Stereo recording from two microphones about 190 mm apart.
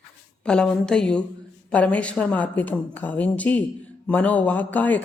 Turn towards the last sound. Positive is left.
turn(degrees=10)  # may be behind; listen again after turning